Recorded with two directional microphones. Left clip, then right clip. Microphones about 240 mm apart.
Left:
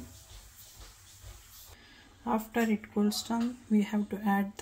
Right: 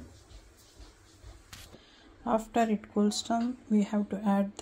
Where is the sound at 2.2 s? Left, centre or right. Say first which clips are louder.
Right 3 dB; right.